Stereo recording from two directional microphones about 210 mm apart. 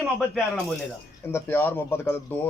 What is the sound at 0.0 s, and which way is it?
Speech, centre (ahead or behind).